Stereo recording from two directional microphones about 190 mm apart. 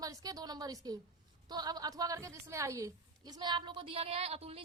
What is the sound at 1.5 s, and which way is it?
A woman's voice, 20° right (ahead or behind).